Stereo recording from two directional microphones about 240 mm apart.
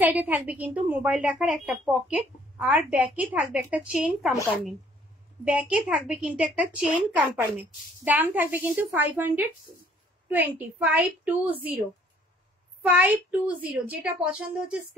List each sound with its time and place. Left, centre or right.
0.0 s a woman's voice: centre
5.4 s a woman's voice: centre
12.8 s a woman's voice: centre